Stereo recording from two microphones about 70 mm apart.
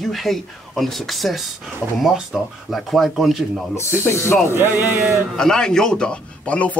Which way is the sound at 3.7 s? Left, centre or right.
Left.